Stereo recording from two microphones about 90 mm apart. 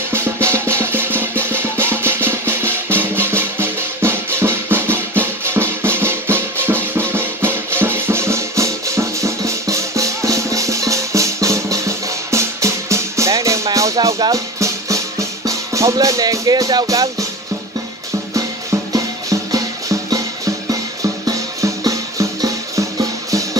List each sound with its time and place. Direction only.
0.1 s music: 25° right (ahead or behind)
18.3 s music: 35° right (ahead or behind)